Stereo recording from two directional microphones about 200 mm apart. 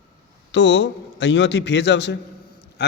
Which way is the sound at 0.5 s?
60° left (ahead or behind).